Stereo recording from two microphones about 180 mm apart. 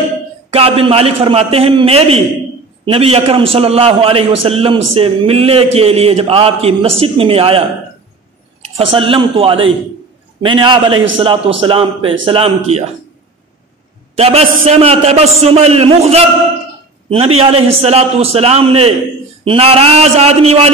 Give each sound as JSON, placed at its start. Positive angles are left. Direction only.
{"t": 0.5, "sound": "a man's voice", "side_deg": -35}
{"t": 8.7, "sound": "a man's voice", "side_deg": -30}
{"t": 14.1, "sound": "a man's voice", "side_deg": -35}